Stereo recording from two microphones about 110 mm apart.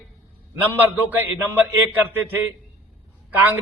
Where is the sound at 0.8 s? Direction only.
15° right (ahead or behind).